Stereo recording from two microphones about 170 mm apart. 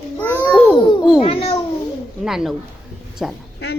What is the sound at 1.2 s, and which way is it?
Babbling, 35° left (ahead or behind).